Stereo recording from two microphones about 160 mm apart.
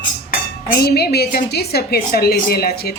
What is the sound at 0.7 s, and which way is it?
A woman's voice, 80° left.